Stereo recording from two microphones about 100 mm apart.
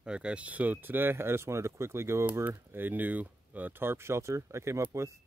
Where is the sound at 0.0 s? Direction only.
10° right (ahead or behind); by 4.8 s 30° right (ahead or behind).